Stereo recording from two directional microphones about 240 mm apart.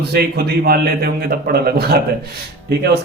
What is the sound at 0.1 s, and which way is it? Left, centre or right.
A man's voice, right.